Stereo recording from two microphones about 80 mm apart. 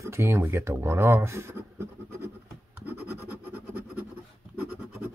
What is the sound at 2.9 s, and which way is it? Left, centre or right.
Scratch, right.